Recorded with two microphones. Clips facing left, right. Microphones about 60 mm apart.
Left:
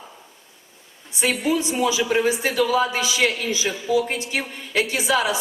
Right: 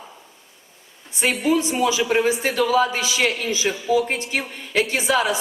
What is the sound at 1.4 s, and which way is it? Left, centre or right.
A woman's voice, right.